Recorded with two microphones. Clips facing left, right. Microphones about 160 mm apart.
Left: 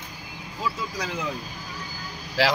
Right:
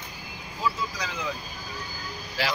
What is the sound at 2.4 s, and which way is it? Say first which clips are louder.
Speech: left 7 dB; 90° left.